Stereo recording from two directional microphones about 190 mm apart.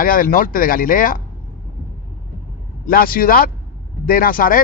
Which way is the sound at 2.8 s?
50° left (ahead or behind).